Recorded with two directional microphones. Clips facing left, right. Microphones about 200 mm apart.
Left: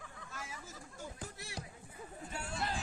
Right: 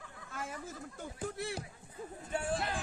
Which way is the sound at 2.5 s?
55° right (ahead or behind).